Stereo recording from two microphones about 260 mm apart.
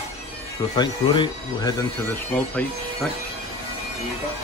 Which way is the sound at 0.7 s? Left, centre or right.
Centre.